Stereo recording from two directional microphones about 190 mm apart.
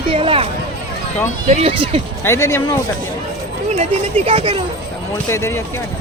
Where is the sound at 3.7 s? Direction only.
30° right (ahead or behind).